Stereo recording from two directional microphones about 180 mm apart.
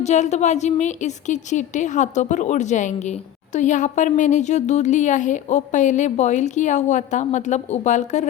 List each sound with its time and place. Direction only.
0.0 s a woman's voice: 40° left (ahead or behind)